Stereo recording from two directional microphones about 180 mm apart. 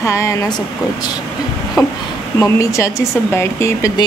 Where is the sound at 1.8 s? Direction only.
20° left (ahead or behind).